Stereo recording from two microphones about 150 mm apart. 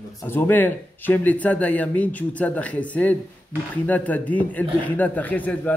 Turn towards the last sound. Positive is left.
turn(degrees=10)  # may be behind; listen again after turning